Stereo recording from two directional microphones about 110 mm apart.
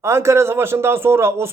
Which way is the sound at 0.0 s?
25° right (ahead or behind).